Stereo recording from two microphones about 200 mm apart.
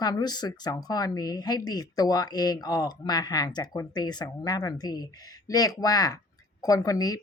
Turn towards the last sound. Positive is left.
turn(degrees=20)  # may be behind; listen again after turning